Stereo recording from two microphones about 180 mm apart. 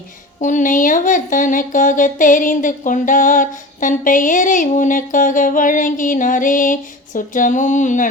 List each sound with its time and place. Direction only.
0.3 s speech: 45° left (ahead or behind)